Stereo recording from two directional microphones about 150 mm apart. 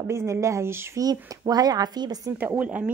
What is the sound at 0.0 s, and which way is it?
Speech, 20° right (ahead or behind).